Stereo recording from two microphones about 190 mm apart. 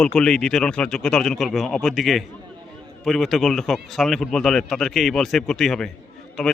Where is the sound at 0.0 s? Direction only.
5° left (ahead or behind).